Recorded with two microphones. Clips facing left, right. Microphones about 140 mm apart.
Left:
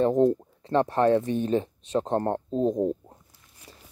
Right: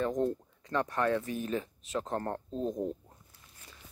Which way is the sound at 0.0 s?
30° left (ahead or behind).